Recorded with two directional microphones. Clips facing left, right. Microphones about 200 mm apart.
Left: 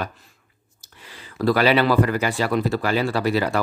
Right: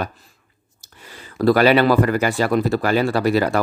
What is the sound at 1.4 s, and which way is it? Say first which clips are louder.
Speech: right 4 dB; 45° right (ahead or behind).